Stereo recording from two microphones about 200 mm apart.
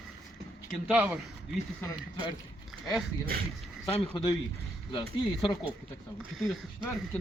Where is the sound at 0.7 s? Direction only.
5° right (ahead or behind).